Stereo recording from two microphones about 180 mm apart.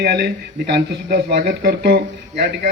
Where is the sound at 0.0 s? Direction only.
60° right (ahead or behind).